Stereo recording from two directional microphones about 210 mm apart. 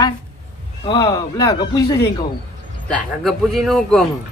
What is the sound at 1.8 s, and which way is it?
Speech, 50° left (ahead or behind).